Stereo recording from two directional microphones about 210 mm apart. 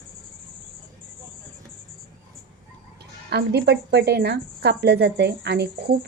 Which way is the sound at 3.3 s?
50° right (ahead or behind).